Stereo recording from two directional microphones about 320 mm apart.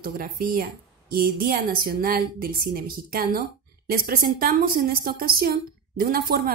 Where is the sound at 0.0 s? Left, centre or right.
Right.